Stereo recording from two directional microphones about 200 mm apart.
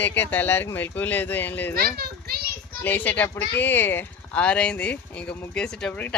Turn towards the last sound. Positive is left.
turn(degrees=5)  # may be behind; listen again after turning